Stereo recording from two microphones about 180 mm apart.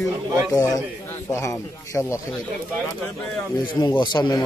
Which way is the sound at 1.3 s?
15° left (ahead or behind).